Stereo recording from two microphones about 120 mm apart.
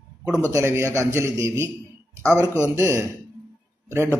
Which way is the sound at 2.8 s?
20° right (ahead or behind).